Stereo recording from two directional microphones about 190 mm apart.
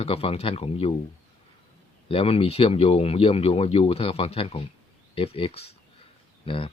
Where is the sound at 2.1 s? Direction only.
30° left (ahead or behind).